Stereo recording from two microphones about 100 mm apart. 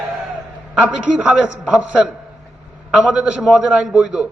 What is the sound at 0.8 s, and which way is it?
A man's voice, 10° right (ahead or behind).